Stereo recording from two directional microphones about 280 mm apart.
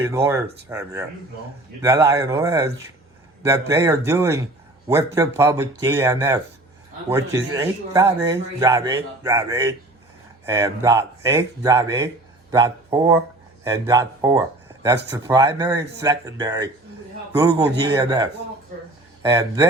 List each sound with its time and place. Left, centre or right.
0.1 s speech: centre
19.2 s speech: centre